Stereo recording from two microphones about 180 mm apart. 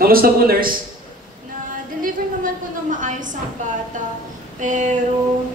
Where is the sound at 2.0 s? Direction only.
45° right (ahead or behind).